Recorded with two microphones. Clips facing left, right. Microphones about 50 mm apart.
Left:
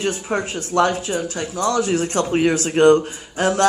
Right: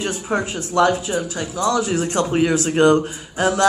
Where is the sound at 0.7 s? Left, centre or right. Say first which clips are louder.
Right 1 dB; left.